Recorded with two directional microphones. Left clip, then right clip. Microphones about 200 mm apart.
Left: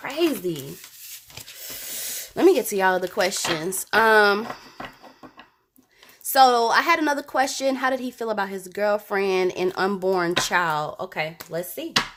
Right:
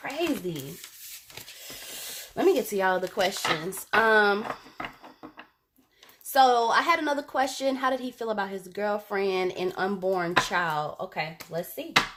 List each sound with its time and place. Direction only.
2.3 s a woman's voice: 40° left (ahead or behind)
6.3 s a woman's voice: 35° left (ahead or behind)